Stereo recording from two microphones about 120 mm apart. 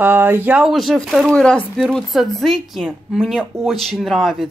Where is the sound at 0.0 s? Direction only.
20° right (ahead or behind).